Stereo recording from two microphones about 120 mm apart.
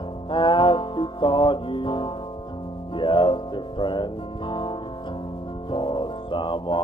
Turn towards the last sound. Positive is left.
turn(degrees=45)  # may be behind; listen again after turning